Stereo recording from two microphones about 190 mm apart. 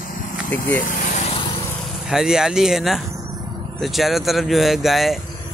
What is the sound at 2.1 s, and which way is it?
Speech, centre (ahead or behind).